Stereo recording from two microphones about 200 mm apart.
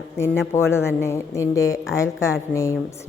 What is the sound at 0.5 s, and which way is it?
A woman's voice, 10° left (ahead or behind).